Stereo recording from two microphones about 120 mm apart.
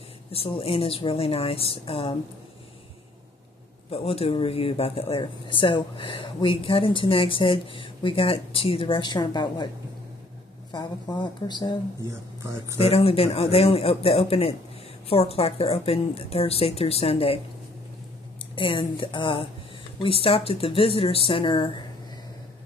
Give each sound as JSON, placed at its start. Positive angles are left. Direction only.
{"t": 0.3, "sound": "speech", "side_deg": 55}
{"t": 3.9, "sound": "speech", "side_deg": 55}
{"t": 10.7, "sound": "speech", "side_deg": 35}
{"t": 12.1, "sound": "speech", "side_deg": -25}
{"t": 12.8, "sound": "speech", "side_deg": 55}
{"t": 18.5, "sound": "speech", "side_deg": 45}